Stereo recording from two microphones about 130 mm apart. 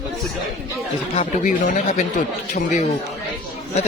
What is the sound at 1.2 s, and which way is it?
Speech, 70° left (ahead or behind).